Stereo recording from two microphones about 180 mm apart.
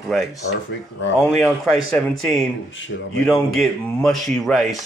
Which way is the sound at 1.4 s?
Centre (ahead or behind).